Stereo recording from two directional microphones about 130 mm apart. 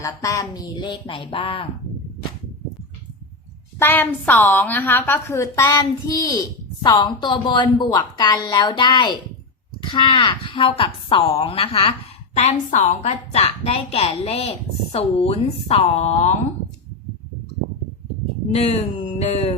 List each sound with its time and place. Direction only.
0.0 s a woman's voice: 25° left (ahead or behind); by 1.6 s 45° left (ahead or behind)
3.8 s a woman's voice: 15° left (ahead or behind); by 13.4 s 65° left (ahead or behind)
13.4 s a woman's voice: 50° left (ahead or behind)
18.5 s a woman's voice: 55° left (ahead or behind)